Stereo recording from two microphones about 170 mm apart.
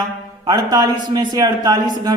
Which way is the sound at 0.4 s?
25° right (ahead or behind).